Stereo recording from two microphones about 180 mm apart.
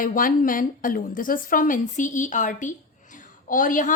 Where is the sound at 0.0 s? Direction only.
50° left (ahead or behind).